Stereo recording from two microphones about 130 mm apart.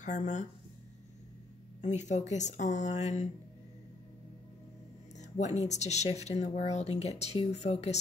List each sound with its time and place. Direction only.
0.0 s speech: 70° left (ahead or behind)
1.8 s speech: 65° left (ahead or behind)
5.1 s speech: 65° left (ahead or behind)